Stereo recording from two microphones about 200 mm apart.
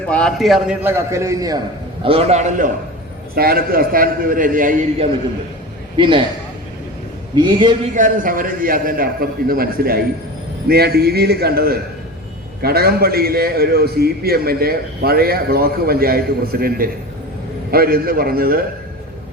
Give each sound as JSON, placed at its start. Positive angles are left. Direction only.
{"t": 0.1, "sound": "a man's voice", "side_deg": 5}
{"t": 2.0, "sound": "a man's voice", "side_deg": -30}
{"t": 3.3, "sound": "a man's voice", "side_deg": -50}
{"t": 6.0, "sound": "a man's voice", "side_deg": -25}
{"t": 7.3, "sound": "a man's voice", "side_deg": -20}
{"t": 7.9, "sound": "a man's voice", "side_deg": -45}